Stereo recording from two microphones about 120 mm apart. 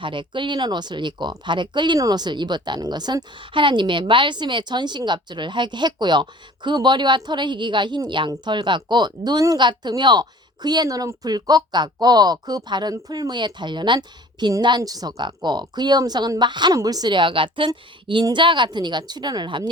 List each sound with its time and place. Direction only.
0.0 s speech: 45° right (ahead or behind)